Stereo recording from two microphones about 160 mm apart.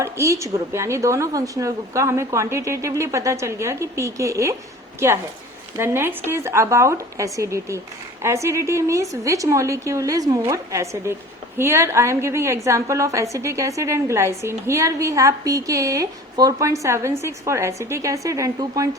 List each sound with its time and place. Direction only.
0.0 s a woman's voice: 20° right (ahead or behind)